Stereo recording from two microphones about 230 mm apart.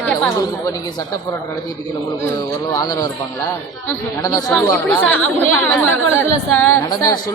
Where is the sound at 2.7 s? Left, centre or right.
Centre.